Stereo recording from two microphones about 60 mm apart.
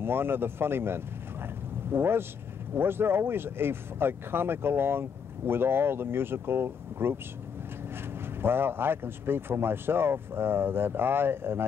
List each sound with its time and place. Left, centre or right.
0.0 s speech: right
8.4 s speech: right